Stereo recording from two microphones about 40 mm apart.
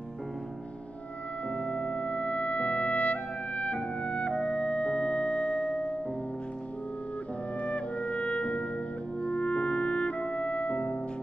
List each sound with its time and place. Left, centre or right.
1.5 s music: left
7.6 s music: left